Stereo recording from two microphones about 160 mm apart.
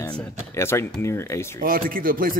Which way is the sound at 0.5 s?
15° left (ahead or behind).